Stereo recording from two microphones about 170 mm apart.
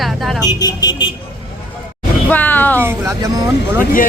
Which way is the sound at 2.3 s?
10° left (ahead or behind).